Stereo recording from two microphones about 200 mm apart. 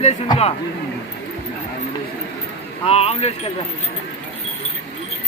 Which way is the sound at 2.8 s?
30° left (ahead or behind).